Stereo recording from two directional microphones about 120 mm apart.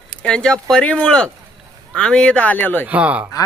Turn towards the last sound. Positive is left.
turn(degrees=-10)  # may be behind; listen again after turning